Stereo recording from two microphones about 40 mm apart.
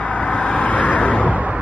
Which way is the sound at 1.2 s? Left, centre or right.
Right.